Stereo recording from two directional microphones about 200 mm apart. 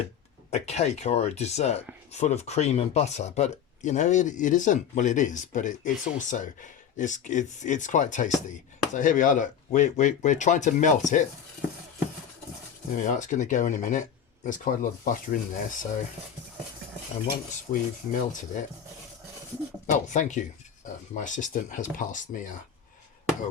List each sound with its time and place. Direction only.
0.5 s speech: 35° left (ahead or behind)
13.0 s speech: 40° left (ahead or behind)
17.5 s speech: 40° left (ahead or behind)
20.1 s speech: 40° left (ahead or behind)